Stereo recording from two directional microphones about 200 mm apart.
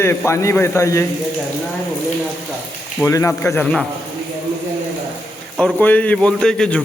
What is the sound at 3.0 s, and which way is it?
Speech, 15° left (ahead or behind).